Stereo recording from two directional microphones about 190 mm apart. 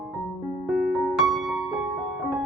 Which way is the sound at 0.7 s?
Centre (ahead or behind).